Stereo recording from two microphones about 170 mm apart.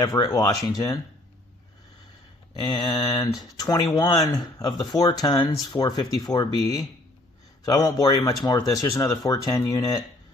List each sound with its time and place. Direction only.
0.0 s speech: 20° left (ahead or behind)
2.5 s speech: 25° left (ahead or behind)